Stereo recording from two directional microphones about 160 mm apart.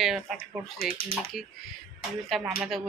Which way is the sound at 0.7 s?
65° left (ahead or behind).